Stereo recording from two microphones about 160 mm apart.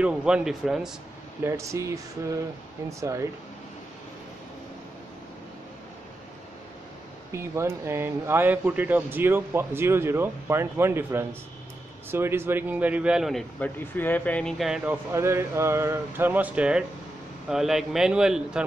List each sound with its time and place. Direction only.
0.0 s a man's voice: 5° right (ahead or behind)
1.4 s speech: 20° right (ahead or behind)
7.3 s a man's voice: 15° right (ahead or behind)
15.1 s a man's voice: 15° right (ahead or behind)